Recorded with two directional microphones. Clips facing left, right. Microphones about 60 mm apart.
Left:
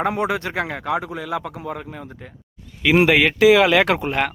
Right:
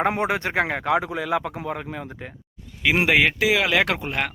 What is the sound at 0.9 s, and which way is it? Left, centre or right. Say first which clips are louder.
Speech: right 2 dB; right.